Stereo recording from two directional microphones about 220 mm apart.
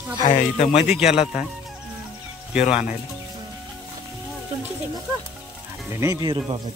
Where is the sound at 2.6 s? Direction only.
30° left (ahead or behind).